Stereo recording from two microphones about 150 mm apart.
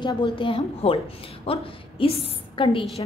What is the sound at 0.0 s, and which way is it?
A woman's voice, 30° left (ahead or behind).